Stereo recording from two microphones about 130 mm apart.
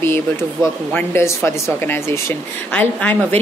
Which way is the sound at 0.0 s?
15° left (ahead or behind).